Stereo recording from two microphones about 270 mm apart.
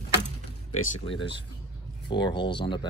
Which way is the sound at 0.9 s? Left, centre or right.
Centre.